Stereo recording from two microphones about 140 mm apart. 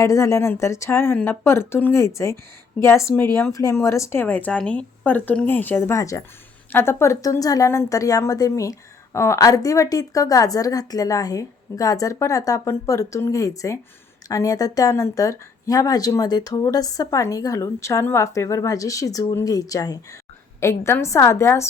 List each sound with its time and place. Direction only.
0.0 s speech: 20° left (ahead or behind)